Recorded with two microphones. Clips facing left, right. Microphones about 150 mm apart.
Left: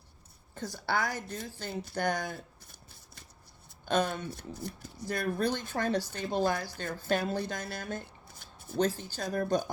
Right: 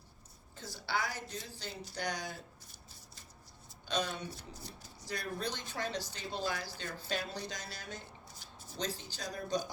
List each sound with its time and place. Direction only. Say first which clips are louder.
0.5 s speech: left 5 dB; 50° left (ahead or behind)
3.8 s speech: left 7 dB; 55° left (ahead or behind)